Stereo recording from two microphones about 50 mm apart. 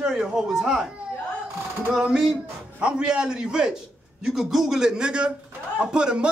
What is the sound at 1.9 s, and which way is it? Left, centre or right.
Speech, centre.